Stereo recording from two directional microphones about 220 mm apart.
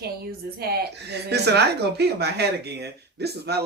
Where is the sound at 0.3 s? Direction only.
45° right (ahead or behind).